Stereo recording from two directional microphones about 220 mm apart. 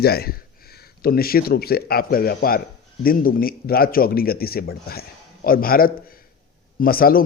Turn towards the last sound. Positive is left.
turn(degrees=40)  # may be behind; listen again after turning